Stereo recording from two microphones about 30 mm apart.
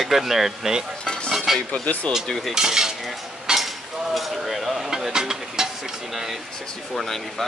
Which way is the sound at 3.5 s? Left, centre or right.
Right.